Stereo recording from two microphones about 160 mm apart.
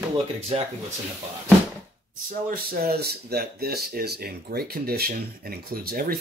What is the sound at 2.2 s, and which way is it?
Speech, 65° right (ahead or behind).